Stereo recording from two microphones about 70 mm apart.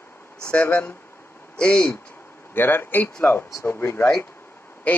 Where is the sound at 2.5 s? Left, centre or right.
Left.